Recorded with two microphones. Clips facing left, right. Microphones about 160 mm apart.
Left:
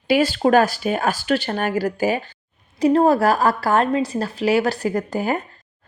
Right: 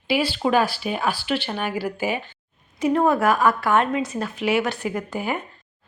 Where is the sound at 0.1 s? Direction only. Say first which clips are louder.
Left 5 dB; 45° left (ahead or behind).